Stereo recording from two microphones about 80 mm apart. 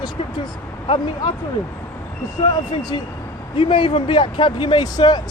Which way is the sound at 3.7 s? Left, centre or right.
Left.